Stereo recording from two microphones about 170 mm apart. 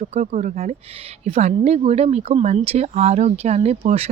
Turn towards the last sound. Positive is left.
turn(degrees=-40)  # may be behind; listen again after turning